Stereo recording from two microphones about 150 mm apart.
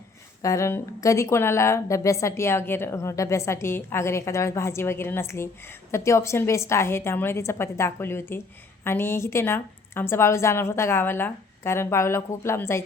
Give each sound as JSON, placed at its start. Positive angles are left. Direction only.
{"t": 0.4, "sound": "a woman's voice", "side_deg": 20}